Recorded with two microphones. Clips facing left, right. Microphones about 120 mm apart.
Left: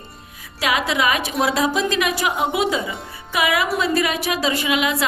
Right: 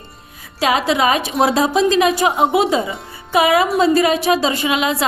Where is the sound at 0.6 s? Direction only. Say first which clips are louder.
Right 4 dB; 30° right (ahead or behind).